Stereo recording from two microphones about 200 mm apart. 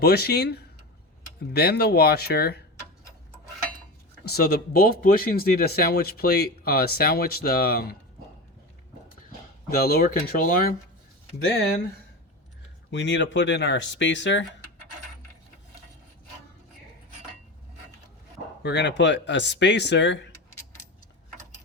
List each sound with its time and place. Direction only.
0.0 s speech: 50° left (ahead or behind)
4.3 s speech: 50° left (ahead or behind)
9.6 s speech: 50° left (ahead or behind)
12.9 s speech: 65° left (ahead or behind)
18.6 s speech: 60° left (ahead or behind)